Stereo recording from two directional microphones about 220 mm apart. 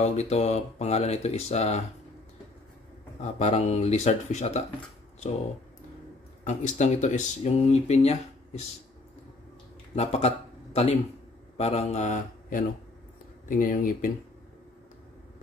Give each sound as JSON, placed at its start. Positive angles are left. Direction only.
{"t": 0.0, "sound": "speech", "side_deg": 30}
{"t": 3.2, "sound": "speech", "side_deg": 30}
{"t": 6.4, "sound": "speech", "side_deg": 35}
{"t": 9.9, "sound": "speech", "side_deg": 30}
{"t": 11.5, "sound": "mantra", "side_deg": 30}
{"t": 13.5, "sound": "speech", "side_deg": 40}